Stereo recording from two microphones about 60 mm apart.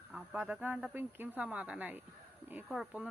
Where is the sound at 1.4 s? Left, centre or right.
Right.